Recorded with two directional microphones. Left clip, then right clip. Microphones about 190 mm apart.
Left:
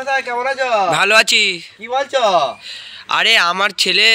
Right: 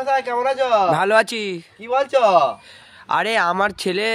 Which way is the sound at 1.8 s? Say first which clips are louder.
Right 1 dB; 15° right (ahead or behind).